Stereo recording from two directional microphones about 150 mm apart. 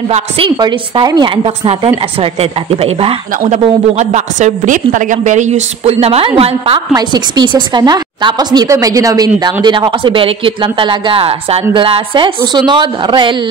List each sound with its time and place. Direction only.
0.6 s a woman's voice: 30° right (ahead or behind)
3.3 s a woman's voice: 50° right (ahead or behind)
6.9 s a woman's voice: 25° right (ahead or behind)